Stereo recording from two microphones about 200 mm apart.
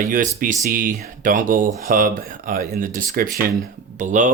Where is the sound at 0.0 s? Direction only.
40° right (ahead or behind).